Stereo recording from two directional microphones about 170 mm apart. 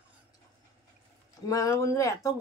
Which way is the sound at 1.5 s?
20° left (ahead or behind).